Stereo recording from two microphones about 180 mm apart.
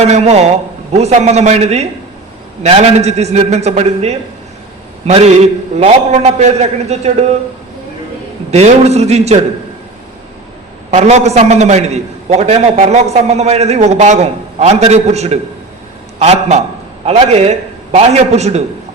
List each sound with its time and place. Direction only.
0.0 s a man's voice: 35° right (ahead or behind)
8.4 s a man's voice: 40° right (ahead or behind)
10.9 s a man's voice: 40° right (ahead or behind)